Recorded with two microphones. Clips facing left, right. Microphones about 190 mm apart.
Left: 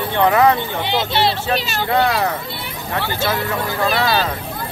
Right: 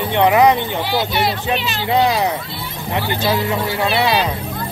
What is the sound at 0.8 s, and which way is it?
Speech, 20° left (ahead or behind).